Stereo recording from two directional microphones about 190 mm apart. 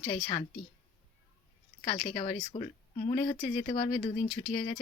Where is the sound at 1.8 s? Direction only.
25° left (ahead or behind).